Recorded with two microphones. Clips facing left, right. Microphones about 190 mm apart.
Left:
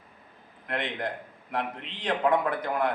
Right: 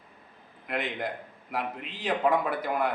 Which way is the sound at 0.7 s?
5° right (ahead or behind).